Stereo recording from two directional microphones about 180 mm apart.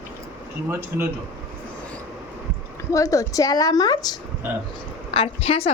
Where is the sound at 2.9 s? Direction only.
20° left (ahead or behind).